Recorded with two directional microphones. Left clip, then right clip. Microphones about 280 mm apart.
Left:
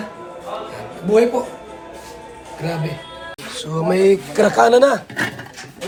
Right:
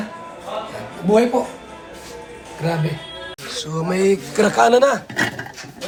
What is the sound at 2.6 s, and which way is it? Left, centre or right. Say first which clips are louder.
Speech: right 2 dB; centre.